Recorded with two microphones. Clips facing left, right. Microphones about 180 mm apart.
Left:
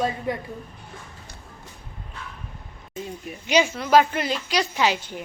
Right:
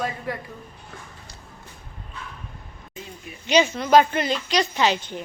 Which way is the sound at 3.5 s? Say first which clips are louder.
Right 1 dB; 10° left (ahead or behind).